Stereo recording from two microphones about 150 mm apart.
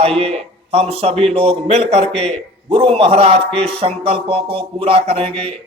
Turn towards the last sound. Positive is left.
turn(degrees=-40)  # may be behind; listen again after turning